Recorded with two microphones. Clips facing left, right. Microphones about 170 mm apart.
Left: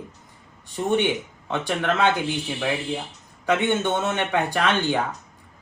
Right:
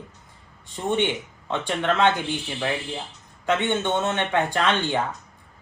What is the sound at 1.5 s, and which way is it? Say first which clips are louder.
Speech: left 1 dB; 10° left (ahead or behind).